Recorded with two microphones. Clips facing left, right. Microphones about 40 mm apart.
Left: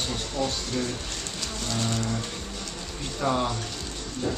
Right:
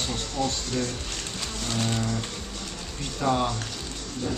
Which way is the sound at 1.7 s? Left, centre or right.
Centre.